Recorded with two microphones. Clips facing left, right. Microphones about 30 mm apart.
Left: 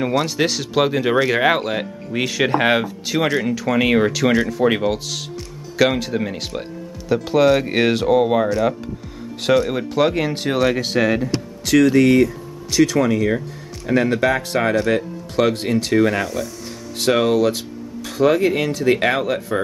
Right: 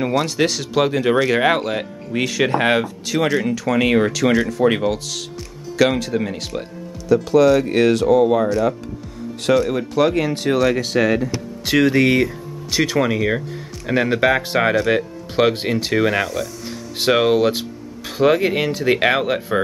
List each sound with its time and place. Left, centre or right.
0.0 s speech: centre
11.7 s speech: right